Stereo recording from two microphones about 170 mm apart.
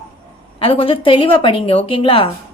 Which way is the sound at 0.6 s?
30° left (ahead or behind).